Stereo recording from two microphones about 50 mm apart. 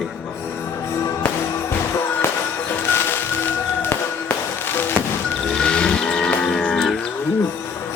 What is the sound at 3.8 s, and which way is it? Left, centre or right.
Music, left.